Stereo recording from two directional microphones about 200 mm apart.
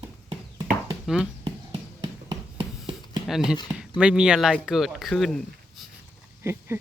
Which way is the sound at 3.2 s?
Centre (ahead or behind).